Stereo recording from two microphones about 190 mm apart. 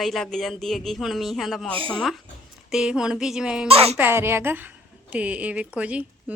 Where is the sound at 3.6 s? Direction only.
30° right (ahead or behind).